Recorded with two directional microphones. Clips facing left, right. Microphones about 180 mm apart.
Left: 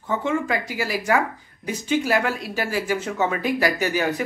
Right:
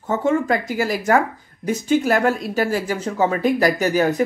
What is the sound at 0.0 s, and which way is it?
Speech, 40° right (ahead or behind).